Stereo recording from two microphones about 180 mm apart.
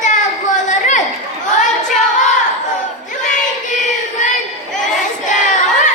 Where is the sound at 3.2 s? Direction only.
45° left (ahead or behind).